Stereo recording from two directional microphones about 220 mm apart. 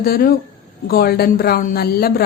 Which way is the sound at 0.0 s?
40° left (ahead or behind).